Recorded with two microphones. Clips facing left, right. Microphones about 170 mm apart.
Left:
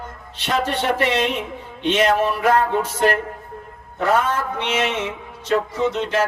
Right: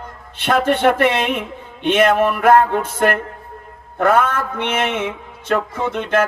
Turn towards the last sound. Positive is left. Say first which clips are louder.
# right 2 dB
turn(degrees=-55)  # may be behind; listen again after turning